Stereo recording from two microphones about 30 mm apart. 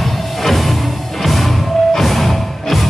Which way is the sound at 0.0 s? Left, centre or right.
Centre.